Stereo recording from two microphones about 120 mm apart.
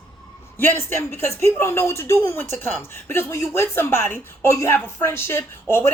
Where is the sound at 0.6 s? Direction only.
20° left (ahead or behind).